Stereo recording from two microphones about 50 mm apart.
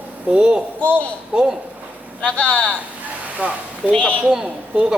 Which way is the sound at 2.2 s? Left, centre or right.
Left.